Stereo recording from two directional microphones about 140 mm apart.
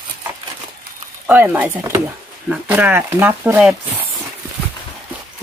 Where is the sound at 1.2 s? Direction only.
15° right (ahead or behind).